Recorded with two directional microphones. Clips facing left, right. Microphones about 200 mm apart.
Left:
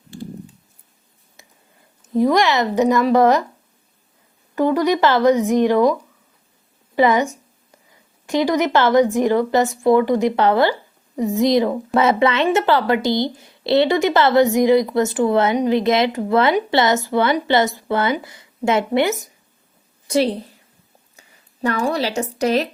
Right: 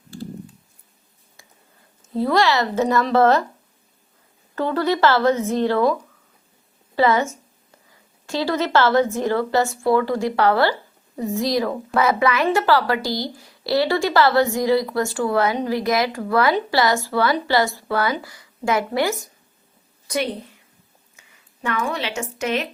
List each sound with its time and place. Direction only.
1.4 s a sound: 20° left (ahead or behind)
2.0 s speech: 15° left (ahead or behind)
4.5 s a woman's voice: 15° left (ahead or behind)
20.1 s a woman's voice: 30° left (ahead or behind)